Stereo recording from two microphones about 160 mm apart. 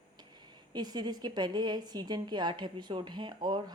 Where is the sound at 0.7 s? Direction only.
25° right (ahead or behind).